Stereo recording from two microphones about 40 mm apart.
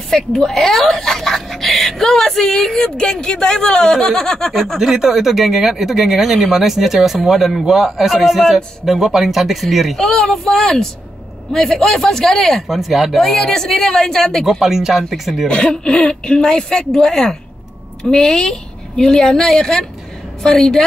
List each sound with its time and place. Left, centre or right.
0.1 s speech: centre
4.7 s speech: centre
9.9 s speech: centre
12.6 s speech: centre
13.2 s speech: centre
14.4 s speech: centre
15.4 s speech: left